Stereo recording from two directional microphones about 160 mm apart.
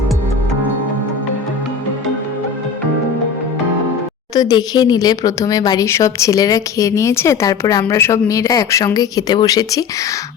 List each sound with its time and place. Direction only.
4.4 s speech: 25° left (ahead or behind)